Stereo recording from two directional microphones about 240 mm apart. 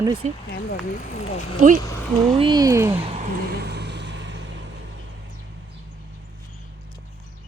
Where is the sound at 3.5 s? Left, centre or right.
Right.